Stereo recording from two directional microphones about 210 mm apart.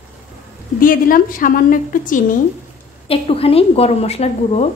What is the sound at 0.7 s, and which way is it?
A woman's voice, 40° left (ahead or behind).